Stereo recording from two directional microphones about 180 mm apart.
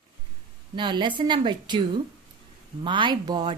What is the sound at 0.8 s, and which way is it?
Speech, 25° right (ahead or behind).